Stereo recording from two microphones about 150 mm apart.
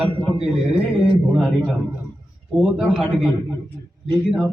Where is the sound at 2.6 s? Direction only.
Centre (ahead or behind).